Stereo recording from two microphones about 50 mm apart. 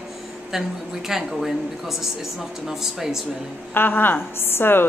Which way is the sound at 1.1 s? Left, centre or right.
Centre.